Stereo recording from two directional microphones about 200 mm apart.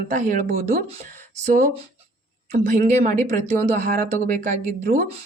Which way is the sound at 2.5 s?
35° right (ahead or behind).